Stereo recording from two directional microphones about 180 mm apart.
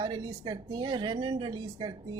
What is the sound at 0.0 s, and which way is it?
Speech, 25° right (ahead or behind).